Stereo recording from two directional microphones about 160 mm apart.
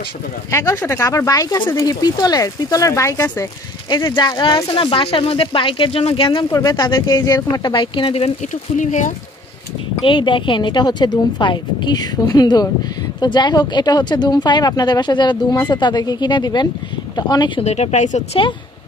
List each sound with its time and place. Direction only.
0.5 s speech: 20° left (ahead or behind); by 8.3 s 35° left (ahead or behind)
8.7 s speech: 50° left (ahead or behind)
10.0 s speech: 30° left (ahead or behind)
17.6 s speech: 45° left (ahead or behind)